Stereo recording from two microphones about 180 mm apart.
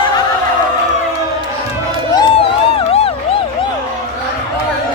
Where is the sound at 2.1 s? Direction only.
30° left (ahead or behind).